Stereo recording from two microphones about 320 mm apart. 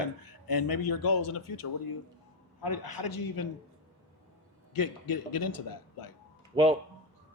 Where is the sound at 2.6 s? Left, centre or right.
Left.